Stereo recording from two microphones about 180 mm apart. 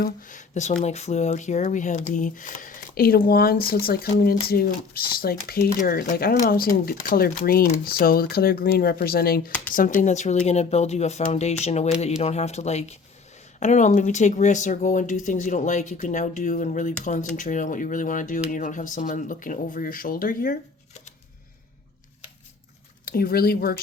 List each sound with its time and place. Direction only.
0.0 s speech: 45° left (ahead or behind)
23.0 s speech: 55° left (ahead or behind)